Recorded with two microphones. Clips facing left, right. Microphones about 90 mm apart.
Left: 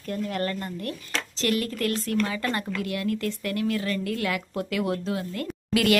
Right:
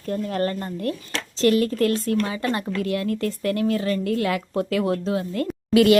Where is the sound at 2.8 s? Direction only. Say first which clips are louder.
Right 4 dB; 35° right (ahead or behind).